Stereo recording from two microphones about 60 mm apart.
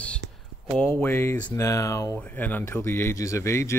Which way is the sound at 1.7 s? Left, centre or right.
Left.